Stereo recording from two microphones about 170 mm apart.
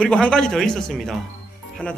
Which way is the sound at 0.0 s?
5° left (ahead or behind).